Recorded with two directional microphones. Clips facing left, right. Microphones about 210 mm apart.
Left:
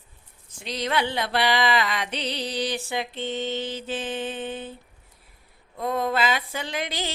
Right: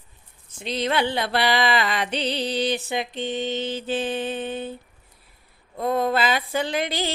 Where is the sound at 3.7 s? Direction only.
35° right (ahead or behind).